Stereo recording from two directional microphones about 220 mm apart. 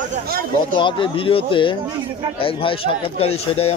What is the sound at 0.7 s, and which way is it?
Speech, 20° left (ahead or behind).